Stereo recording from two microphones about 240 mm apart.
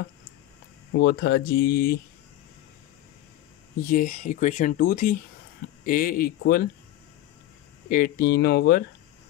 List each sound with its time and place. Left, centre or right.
1.0 s speech: left
3.9 s speech: left
7.9 s speech: left